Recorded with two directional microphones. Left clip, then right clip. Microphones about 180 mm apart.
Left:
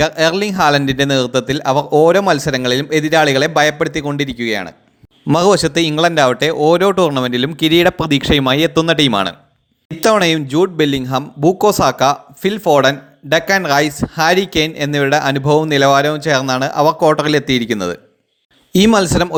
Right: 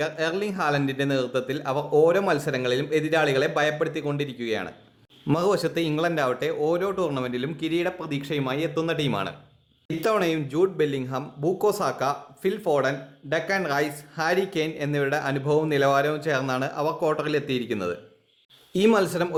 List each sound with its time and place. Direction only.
0.0 s a man's voice: 35° left (ahead or behind)